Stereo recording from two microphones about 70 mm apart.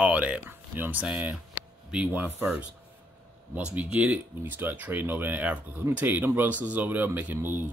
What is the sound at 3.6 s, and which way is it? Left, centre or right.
Speech, centre.